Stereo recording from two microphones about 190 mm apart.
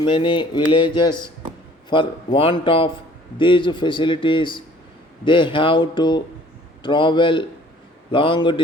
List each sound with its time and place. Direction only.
0.0 s speech: 25° left (ahead or behind)